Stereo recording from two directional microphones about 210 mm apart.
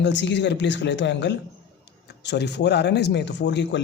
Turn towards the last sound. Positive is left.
turn(degrees=55)  # may be behind; listen again after turning